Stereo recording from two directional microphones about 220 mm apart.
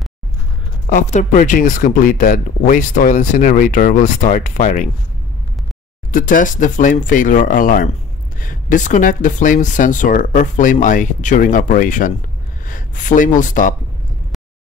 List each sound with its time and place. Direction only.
0.8 s speech: 35° left (ahead or behind)
6.1 s speech: 40° left (ahead or behind)